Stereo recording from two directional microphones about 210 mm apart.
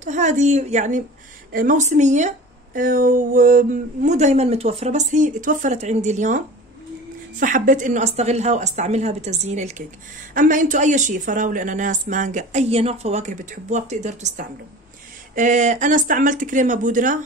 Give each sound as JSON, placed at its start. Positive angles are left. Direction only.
{"t": 0.0, "sound": "speech", "side_deg": -35}